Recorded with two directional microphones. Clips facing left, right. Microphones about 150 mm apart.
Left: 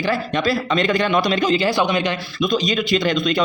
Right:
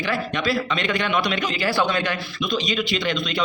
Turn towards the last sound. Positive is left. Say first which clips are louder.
# left 6 dB
turn(degrees=45)  # may be behind; listen again after turning